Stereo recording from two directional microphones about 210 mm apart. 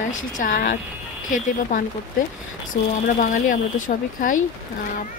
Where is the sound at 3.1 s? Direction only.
40° left (ahead or behind).